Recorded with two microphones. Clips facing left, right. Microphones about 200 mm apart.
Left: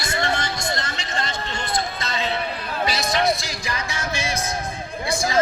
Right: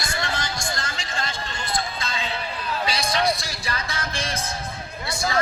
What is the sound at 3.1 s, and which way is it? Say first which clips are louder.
Music: left 2 dB; 25° left (ahead or behind).